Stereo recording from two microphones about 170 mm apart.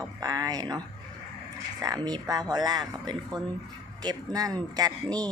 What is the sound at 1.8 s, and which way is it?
Speech, 20° right (ahead or behind).